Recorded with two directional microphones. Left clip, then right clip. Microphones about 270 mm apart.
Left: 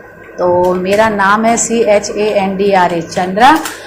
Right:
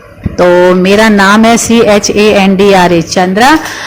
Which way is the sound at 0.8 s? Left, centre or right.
Right.